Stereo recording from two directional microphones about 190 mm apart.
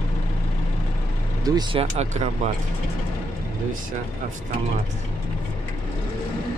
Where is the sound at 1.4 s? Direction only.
20° right (ahead or behind); by 2.5 s 35° right (ahead or behind).